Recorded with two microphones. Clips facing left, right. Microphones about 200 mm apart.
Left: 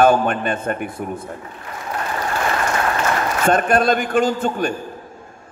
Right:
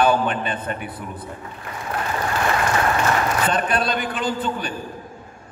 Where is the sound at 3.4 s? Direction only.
45° left (ahead or behind).